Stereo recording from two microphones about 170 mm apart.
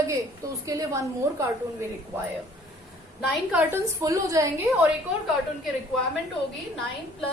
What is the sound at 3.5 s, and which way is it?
A woman's voice, 10° right (ahead or behind).